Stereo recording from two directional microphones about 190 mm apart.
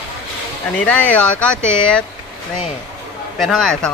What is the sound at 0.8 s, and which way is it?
Speech, 5° left (ahead or behind).